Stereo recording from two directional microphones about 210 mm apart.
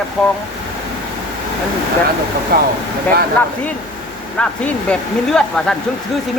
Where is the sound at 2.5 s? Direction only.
45° right (ahead or behind).